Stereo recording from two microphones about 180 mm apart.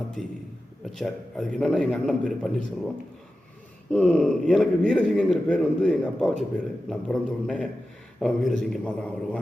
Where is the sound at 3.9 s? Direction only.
5° left (ahead or behind).